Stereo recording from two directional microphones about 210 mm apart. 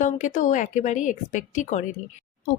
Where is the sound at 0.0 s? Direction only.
35° left (ahead or behind).